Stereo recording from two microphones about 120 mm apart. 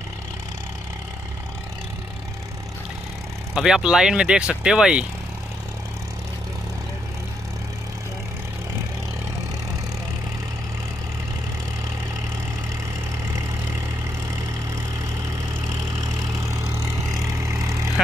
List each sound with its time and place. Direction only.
3.5 s speech: 5° right (ahead or behind)
16.0 s vehicle: 25° right (ahead or behind)